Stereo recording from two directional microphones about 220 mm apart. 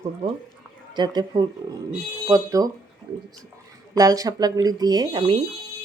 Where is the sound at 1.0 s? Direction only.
20° right (ahead or behind).